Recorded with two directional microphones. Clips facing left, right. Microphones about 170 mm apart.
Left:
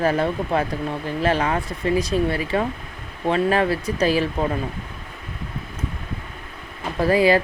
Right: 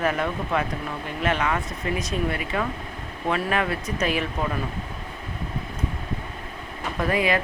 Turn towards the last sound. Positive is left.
turn(degrees=35)  # may be behind; listen again after turning